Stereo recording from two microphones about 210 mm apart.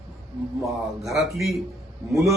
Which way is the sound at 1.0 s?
Centre (ahead or behind).